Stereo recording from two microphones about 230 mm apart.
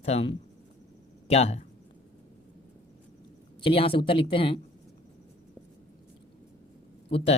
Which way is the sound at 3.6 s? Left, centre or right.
Left.